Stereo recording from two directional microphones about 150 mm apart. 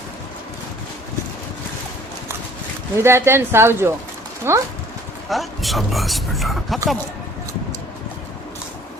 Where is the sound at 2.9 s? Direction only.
15° right (ahead or behind).